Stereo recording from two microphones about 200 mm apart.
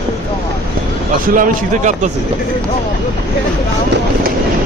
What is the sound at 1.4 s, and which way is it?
Speech, 40° right (ahead or behind).